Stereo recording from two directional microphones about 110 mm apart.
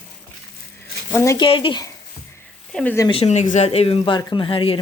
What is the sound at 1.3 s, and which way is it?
Speech, 50° left (ahead or behind).